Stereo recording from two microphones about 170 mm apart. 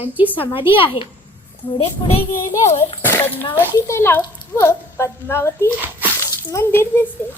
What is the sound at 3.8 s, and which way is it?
Speech, 15° left (ahead or behind).